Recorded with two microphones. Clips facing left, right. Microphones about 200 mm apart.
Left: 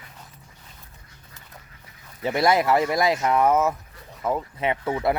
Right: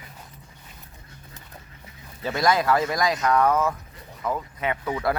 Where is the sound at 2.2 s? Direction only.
25° left (ahead or behind).